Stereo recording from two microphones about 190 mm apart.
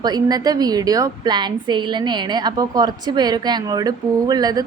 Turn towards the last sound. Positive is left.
turn(degrees=-20)  # may be behind; listen again after turning